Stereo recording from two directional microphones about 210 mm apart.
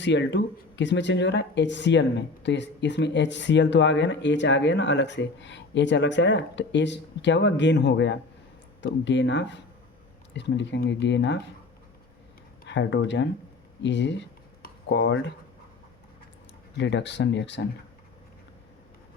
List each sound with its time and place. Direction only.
0.0 s speech: 60° left (ahead or behind)
12.6 s speech: 60° left (ahead or behind)
16.7 s speech: 55° left (ahead or behind)